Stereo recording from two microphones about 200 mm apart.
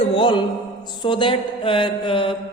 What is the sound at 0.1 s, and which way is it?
Music, 25° left (ahead or behind).